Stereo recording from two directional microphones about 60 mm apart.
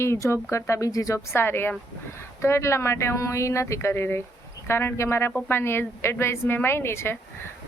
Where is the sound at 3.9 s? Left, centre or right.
Left.